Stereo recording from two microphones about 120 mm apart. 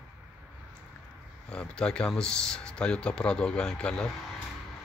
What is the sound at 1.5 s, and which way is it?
Speech, 5° left (ahead or behind).